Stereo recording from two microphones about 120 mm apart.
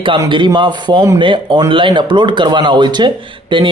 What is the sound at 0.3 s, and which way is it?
Speech, 40° right (ahead or behind).